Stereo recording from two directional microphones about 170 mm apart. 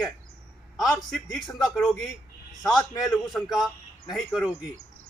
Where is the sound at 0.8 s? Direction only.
Centre (ahead or behind).